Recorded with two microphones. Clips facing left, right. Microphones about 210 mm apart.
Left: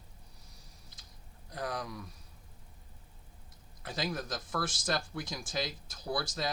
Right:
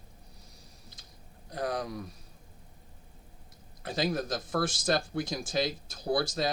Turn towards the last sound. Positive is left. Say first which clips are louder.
# right 6 dB
turn(degrees=-30)  # may be behind; listen again after turning